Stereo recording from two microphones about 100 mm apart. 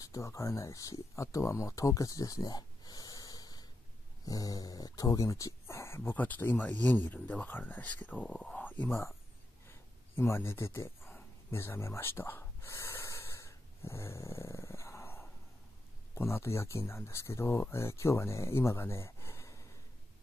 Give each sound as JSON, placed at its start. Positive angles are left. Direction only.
{"t": 0.0, "sound": "speech", "side_deg": 30}
{"t": 9.7, "sound": "a sound", "side_deg": 25}
{"t": 16.2, "sound": "speech", "side_deg": 25}